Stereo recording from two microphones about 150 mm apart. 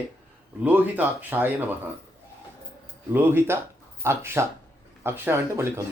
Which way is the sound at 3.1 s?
15° right (ahead or behind).